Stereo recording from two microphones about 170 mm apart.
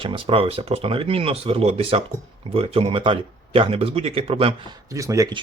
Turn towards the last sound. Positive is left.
turn(degrees=-20)  # may be behind; listen again after turning